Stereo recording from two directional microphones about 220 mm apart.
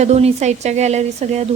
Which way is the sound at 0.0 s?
30° right (ahead or behind).